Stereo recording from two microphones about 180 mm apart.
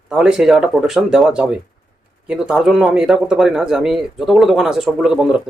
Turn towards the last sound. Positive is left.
turn(degrees=-5)  # may be behind; listen again after turning